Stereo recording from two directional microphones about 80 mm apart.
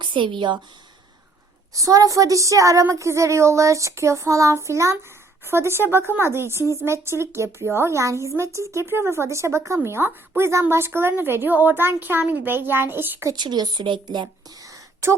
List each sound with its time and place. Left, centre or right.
0.0 s speech: right
1.7 s a woman's voice: right
13.3 s a woman's voice: right
14.6 s a sound: right